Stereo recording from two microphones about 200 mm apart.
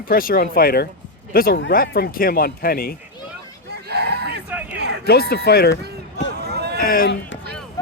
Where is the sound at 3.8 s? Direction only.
55° right (ahead or behind).